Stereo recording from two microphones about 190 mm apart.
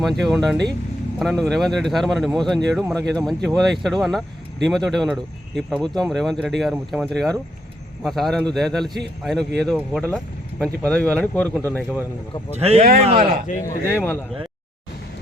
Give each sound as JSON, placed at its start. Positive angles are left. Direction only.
{"t": 0.0, "sound": "speech", "side_deg": 0}
{"t": 10.6, "sound": "speech", "side_deg": 5}
{"t": 12.5, "sound": "speech", "side_deg": -35}
{"t": 13.5, "sound": "speech", "side_deg": 45}
{"t": 14.0, "sound": "speech", "side_deg": 10}